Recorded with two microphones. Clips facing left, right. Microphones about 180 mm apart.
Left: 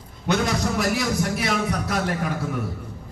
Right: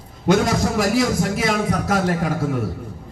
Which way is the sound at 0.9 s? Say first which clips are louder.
Right 5 dB; 90° right.